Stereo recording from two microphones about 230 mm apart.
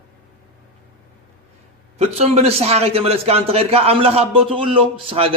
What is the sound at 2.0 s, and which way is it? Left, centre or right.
A man's voice, right.